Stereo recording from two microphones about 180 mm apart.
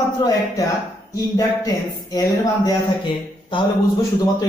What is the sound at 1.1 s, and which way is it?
Speech, 20° left (ahead or behind).